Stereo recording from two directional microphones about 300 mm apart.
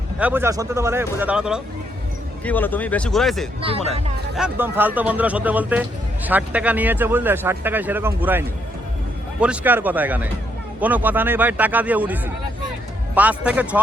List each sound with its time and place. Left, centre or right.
0.2 s a man's voice: centre
3.6 s speech: centre
4.4 s a man's voice: centre